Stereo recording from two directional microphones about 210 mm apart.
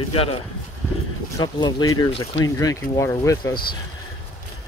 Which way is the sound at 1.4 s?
20° left (ahead or behind).